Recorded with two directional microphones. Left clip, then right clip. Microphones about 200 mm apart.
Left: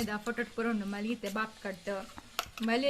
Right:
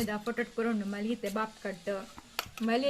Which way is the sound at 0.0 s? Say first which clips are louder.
Right 1 dB; 10° left (ahead or behind).